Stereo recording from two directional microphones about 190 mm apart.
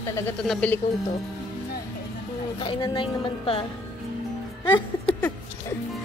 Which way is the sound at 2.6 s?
25° left (ahead or behind).